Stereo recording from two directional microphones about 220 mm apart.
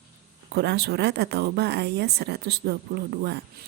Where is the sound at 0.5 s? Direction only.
50° right (ahead or behind).